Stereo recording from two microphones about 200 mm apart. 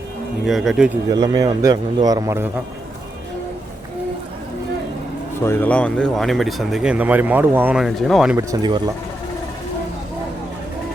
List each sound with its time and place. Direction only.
0.4 s speech: centre (ahead or behind)
1.1 s a man's voice: 20° right (ahead or behind)
5.4 s speech: 10° left (ahead or behind)
8.4 s a man's voice: 20° right (ahead or behind)